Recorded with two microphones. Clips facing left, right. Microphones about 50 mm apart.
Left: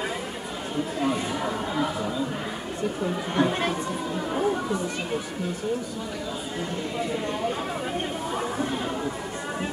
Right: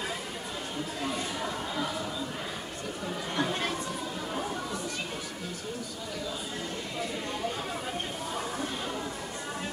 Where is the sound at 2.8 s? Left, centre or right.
Centre.